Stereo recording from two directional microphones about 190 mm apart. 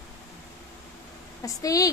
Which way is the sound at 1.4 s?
20° left (ahead or behind).